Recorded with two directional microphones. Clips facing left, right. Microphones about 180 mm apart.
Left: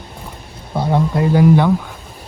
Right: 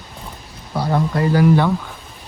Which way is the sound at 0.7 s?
20° left (ahead or behind).